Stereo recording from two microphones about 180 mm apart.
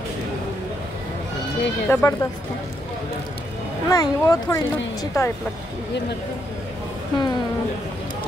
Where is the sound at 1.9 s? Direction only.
15° left (ahead or behind).